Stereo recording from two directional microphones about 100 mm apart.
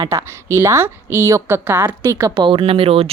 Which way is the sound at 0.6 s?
25° right (ahead or behind).